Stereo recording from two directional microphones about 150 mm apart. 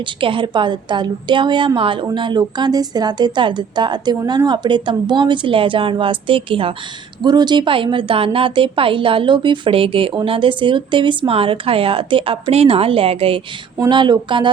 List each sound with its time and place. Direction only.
0.0 s a woman's voice: 35° right (ahead or behind)